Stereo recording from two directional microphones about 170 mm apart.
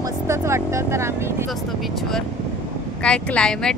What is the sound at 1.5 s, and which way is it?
Speech, centre (ahead or behind).